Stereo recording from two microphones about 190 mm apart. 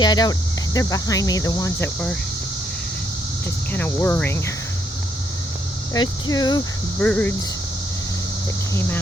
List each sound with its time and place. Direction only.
0.0 s speech: 20° left (ahead or behind)
3.7 s speech: 10° left (ahead or behind)
5.9 s speech: 20° left (ahead or behind)
7.0 s speech: 5° left (ahead or behind)
8.7 s speech: 10° left (ahead or behind)